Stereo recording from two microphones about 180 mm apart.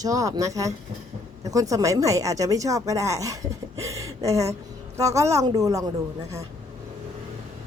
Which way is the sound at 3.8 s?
15° right (ahead or behind).